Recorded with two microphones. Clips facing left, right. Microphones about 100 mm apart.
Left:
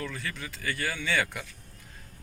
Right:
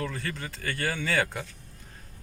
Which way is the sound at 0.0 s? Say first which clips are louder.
Right 3 dB; 40° right (ahead or behind).